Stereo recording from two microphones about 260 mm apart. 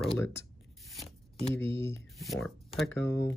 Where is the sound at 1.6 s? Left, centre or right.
Left.